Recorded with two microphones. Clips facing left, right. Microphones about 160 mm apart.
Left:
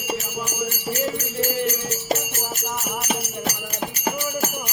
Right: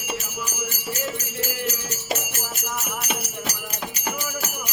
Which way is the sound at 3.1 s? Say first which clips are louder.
Left 5 dB; 30° left (ahead or behind).